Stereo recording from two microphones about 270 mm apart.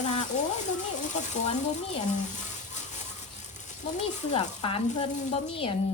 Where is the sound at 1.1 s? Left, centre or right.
Left.